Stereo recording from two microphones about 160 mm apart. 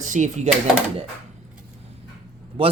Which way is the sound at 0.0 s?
50° right (ahead or behind).